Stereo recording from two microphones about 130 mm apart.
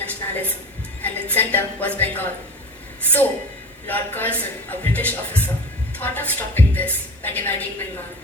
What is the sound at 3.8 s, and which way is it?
A woman's voice, 15° left (ahead or behind).